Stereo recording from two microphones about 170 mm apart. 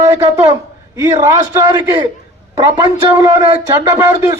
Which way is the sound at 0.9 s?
20° right (ahead or behind).